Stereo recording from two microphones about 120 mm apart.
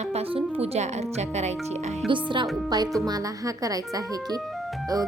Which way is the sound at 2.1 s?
45° right (ahead or behind).